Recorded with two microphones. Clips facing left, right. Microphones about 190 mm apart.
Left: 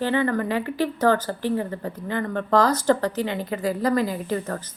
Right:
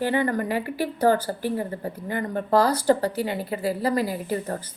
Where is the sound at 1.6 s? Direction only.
40° right (ahead or behind).